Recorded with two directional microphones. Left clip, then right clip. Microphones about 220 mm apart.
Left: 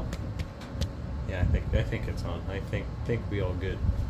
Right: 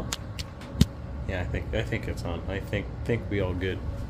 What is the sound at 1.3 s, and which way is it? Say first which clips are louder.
Speech: right 2 dB; 20° right (ahead or behind).